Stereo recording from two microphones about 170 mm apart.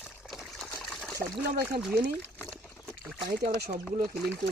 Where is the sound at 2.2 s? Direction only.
10° left (ahead or behind).